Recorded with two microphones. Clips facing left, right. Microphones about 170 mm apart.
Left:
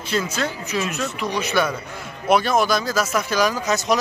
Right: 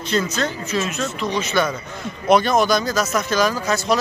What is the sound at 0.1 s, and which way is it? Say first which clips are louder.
Speech: right 2 dB; 10° left (ahead or behind).